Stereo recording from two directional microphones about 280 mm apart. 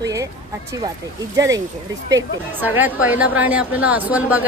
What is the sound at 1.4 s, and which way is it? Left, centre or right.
A woman's voice, centre.